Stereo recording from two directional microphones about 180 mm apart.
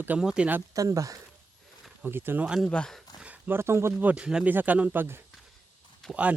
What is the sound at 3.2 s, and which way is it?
Speech, 10° right (ahead or behind).